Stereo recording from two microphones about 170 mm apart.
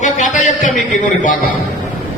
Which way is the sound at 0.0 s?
45° left (ahead or behind).